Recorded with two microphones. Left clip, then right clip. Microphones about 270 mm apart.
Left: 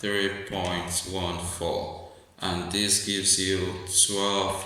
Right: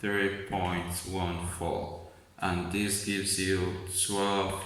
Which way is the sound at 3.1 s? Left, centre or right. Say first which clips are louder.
Left 5 dB; centre.